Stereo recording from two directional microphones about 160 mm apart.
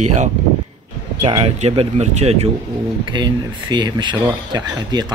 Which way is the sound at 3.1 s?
30° right (ahead or behind).